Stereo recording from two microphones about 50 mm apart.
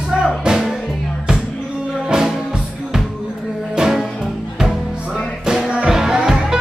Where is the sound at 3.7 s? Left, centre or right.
Centre.